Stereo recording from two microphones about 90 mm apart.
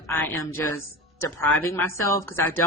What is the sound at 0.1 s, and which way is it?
A woman's voice, 20° left (ahead or behind).